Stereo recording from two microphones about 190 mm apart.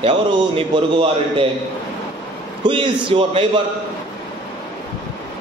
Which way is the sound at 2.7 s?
25° right (ahead or behind).